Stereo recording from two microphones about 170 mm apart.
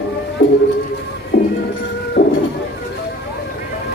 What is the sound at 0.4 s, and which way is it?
Music, 80° left.